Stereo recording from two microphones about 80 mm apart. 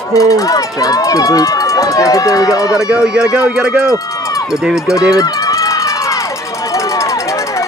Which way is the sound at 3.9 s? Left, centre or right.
Left.